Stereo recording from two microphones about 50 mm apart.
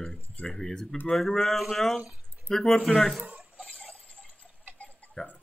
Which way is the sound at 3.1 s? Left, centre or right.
Right.